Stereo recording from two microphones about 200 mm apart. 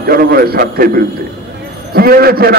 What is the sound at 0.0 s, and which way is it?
A man's voice, 50° right (ahead or behind).